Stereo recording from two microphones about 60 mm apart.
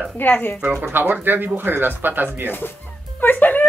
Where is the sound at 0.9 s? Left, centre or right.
Right.